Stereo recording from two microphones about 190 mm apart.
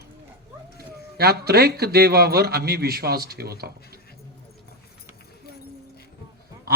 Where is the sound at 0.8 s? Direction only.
55° right (ahead or behind).